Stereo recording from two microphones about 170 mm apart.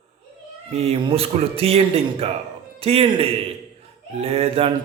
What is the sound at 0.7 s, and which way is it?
Speech, 35° right (ahead or behind).